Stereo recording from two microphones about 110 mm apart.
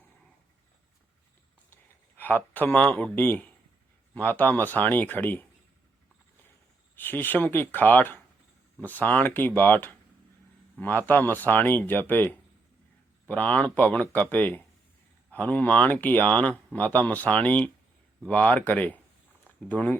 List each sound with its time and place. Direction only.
1.7 s speech: 15° left (ahead or behind)
6.9 s speech: 20° left (ahead or behind)